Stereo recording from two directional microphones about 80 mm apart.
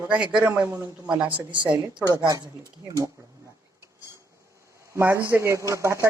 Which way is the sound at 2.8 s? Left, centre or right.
Right.